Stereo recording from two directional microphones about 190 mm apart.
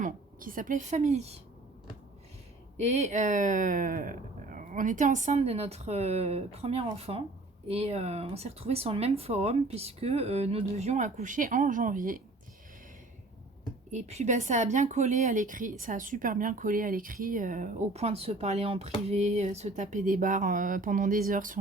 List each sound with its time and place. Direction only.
0.0 s speech: 45° right (ahead or behind)
2.7 s speech: 35° right (ahead or behind)
13.9 s speech: 35° right (ahead or behind)